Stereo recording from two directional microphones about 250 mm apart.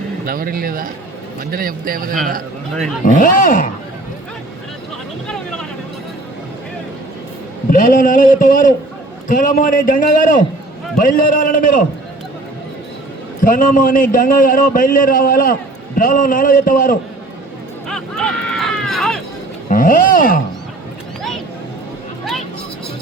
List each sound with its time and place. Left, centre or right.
0.3 s a man's voice: right
3.0 s a man's voice: left
7.7 s a man's voice: left
13.4 s a man's voice: left
17.8 s a sound: centre
19.7 s speech: left
21.2 s a sound: centre